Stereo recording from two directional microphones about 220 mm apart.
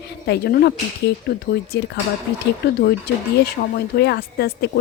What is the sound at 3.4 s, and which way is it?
Speech, 45° left (ahead or behind).